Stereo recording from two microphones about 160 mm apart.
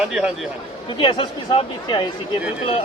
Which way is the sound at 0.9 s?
30° left (ahead or behind).